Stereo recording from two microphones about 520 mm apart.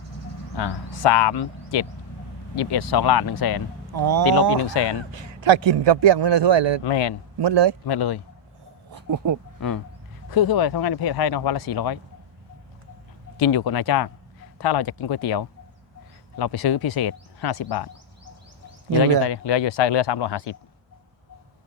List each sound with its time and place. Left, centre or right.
0.5 s speech: left
3.9 s speech: right
4.3 s speech: left
5.1 s a man's voice: right
6.8 s speech: left
7.3 s a man's voice: right
7.9 s speech: left
8.9 s a sound: right
9.6 s speech: left
13.4 s speech: left
19.2 s speech: left